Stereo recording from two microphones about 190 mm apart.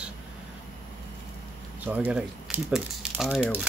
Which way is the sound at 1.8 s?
10° right (ahead or behind).